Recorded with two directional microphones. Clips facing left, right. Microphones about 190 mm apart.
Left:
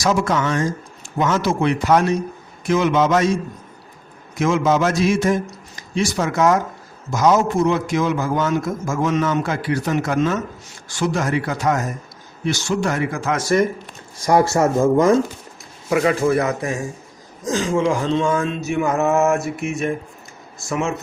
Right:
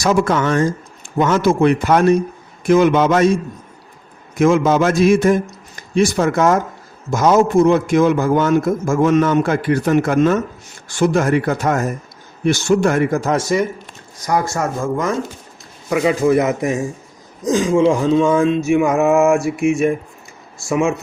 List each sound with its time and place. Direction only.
0.0 s a man's voice: 55° right (ahead or behind)
4.4 s a man's voice: 55° right (ahead or behind)
14.3 s a man's voice: 25° left (ahead or behind)
15.9 s a man's voice: 5° right (ahead or behind)
16.2 s a man's voice: 20° right (ahead or behind)